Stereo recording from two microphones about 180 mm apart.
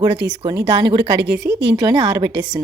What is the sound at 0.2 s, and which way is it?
Speech, 75° right (ahead or behind).